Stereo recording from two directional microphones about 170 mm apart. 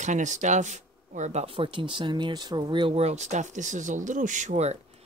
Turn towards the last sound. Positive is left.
turn(degrees=-40)  # may be behind; listen again after turning